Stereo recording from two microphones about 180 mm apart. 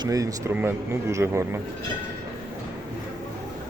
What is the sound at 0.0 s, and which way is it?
Speech, 20° right (ahead or behind).